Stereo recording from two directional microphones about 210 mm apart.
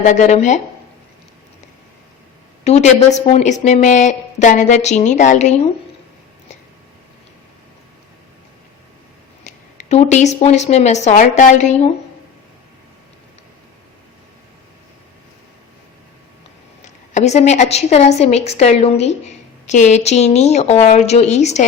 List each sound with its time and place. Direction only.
0.0 s a woman's voice: 35° left (ahead or behind)
2.6 s a woman's voice: 35° left (ahead or behind)
9.4 s a woman's voice: 35° left (ahead or behind)
16.8 s a woman's voice: 35° left (ahead or behind)